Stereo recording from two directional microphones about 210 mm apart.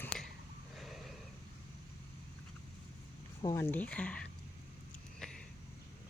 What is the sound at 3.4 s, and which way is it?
Speech, 10° left (ahead or behind).